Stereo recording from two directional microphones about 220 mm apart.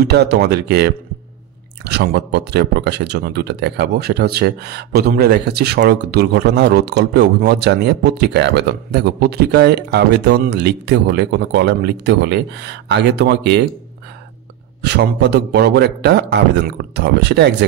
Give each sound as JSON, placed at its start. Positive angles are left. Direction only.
{"t": 0.0, "sound": "speech", "side_deg": -50}
{"t": 14.8, "sound": "speech", "side_deg": -50}